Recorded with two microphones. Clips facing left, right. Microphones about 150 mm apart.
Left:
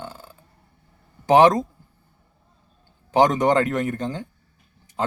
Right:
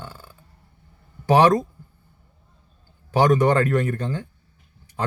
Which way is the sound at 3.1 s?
20° left (ahead or behind).